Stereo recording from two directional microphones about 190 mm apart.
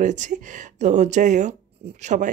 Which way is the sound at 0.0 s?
40° right (ahead or behind).